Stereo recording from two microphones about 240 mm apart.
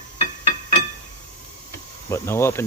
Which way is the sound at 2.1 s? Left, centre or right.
Centre.